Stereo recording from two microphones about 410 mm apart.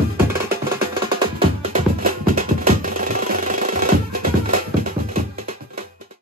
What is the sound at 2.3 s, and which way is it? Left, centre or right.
Music, centre.